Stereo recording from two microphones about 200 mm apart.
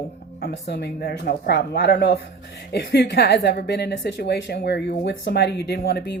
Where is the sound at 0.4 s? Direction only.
55° left (ahead or behind).